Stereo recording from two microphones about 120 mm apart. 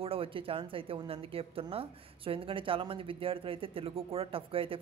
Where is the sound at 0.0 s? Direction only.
50° right (ahead or behind).